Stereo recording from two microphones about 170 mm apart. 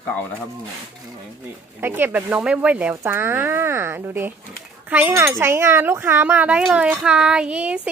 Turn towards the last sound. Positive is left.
turn(degrees=-5)  # may be behind; listen again after turning